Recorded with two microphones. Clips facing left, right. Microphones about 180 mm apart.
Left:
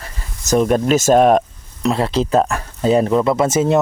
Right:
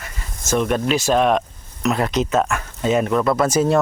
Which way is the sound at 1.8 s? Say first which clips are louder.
Left 2 dB; 30° left (ahead or behind).